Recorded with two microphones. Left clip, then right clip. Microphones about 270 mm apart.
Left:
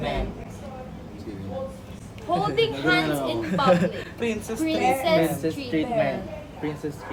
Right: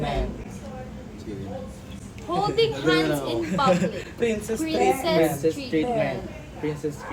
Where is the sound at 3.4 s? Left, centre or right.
Centre.